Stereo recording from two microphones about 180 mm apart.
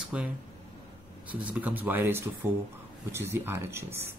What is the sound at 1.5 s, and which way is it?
Speech, 10° right (ahead or behind).